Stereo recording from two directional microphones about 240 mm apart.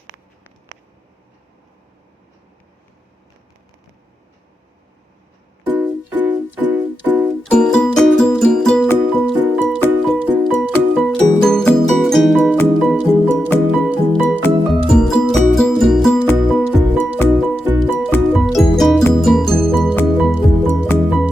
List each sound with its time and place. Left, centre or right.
5.6 s music: centre